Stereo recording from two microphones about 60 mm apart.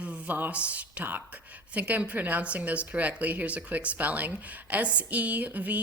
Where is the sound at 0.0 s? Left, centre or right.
Centre.